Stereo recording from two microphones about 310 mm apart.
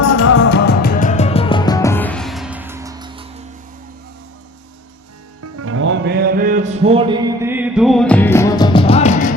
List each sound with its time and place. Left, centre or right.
0.0 s music: left
0.4 s music: left; by 3.2 s centre
5.4 s music: right; by 9.3 s left